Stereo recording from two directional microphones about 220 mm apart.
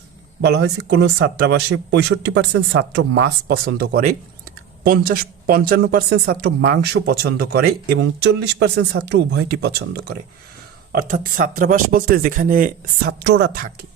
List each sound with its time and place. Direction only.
0.5 s speech: 50° right (ahead or behind)